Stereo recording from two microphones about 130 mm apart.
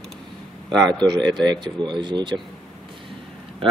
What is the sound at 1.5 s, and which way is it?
Speech, 35° right (ahead or behind).